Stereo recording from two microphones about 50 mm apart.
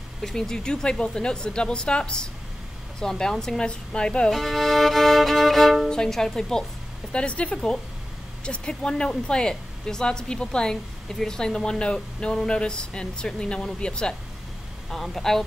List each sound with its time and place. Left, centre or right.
0.2 s speech: centre
4.3 s music: centre
5.9 s speech: centre
7.1 s speech: left
14.9 s music: centre